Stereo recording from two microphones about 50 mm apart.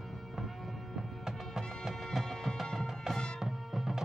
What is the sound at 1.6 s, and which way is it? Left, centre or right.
Music, centre.